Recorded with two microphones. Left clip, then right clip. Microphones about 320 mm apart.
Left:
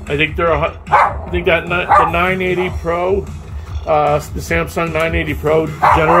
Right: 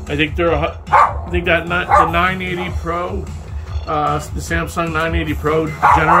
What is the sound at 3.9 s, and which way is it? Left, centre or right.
Speech, centre.